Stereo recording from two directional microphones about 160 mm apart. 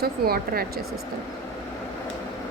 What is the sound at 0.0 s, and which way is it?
Speech, 75° right (ahead or behind).